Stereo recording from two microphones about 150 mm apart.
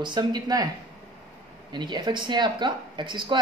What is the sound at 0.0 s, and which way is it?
Speech, 30° right (ahead or behind).